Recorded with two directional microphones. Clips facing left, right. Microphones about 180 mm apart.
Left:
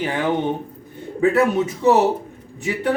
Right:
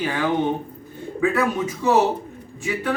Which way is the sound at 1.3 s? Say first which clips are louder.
Left 4 dB; 20° left (ahead or behind).